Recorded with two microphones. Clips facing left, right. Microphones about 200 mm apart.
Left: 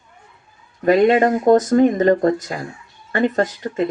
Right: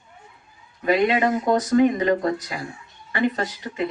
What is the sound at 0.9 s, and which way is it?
Speech, 45° left (ahead or behind).